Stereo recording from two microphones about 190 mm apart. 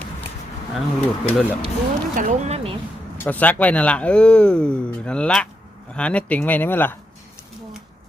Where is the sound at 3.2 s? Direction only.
10° left (ahead or behind).